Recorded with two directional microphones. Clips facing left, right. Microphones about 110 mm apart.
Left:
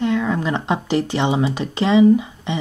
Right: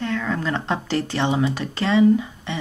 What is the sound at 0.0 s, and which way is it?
Speech, 15° left (ahead or behind).